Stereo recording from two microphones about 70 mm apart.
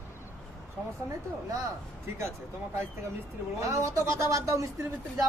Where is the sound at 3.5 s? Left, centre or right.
Right.